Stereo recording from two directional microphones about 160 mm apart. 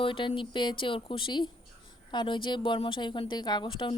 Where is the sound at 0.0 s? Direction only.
35° left (ahead or behind).